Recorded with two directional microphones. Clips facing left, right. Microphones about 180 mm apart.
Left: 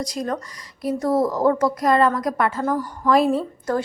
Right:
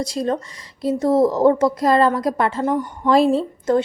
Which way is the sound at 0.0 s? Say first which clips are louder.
Right 4 dB; 30° right (ahead or behind).